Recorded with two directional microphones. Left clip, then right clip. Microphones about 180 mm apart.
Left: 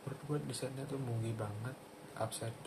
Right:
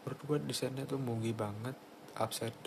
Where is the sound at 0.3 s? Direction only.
45° right (ahead or behind).